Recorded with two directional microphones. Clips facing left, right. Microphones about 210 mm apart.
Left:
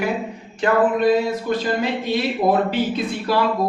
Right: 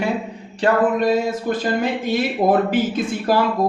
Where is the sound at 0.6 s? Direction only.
45° right (ahead or behind).